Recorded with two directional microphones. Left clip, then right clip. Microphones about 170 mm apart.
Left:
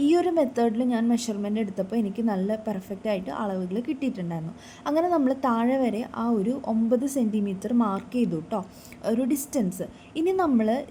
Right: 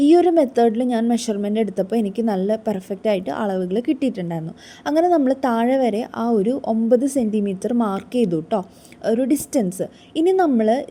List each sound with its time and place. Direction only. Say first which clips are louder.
0.0 s a woman's voice: right 8 dB; 25° right (ahead or behind)